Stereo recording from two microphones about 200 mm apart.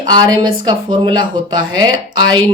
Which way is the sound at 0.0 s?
20° right (ahead or behind).